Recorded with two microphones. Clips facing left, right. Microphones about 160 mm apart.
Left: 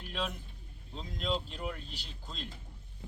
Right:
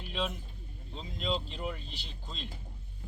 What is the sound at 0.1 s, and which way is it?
Speech, centre (ahead or behind).